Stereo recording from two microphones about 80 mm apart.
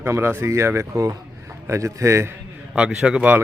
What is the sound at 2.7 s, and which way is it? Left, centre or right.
Speech, centre.